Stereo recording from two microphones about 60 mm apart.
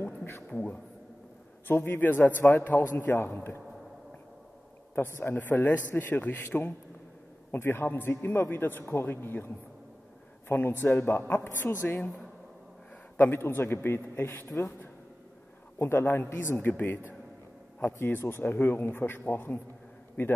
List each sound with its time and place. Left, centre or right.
0.0 s a sound: left
0.5 s speech: left
1.7 s a man's voice: left
4.9 s a man's voice: left
5.4 s a man's voice: left
7.5 s a man's voice: left
10.5 s a man's voice: left
13.2 s a man's voice: left
15.8 s a man's voice: left